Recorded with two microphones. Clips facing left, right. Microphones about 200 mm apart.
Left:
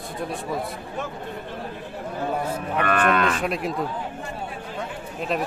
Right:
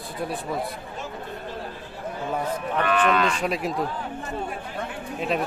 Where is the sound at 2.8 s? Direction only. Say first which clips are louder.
Even; 55° left (ahead or behind).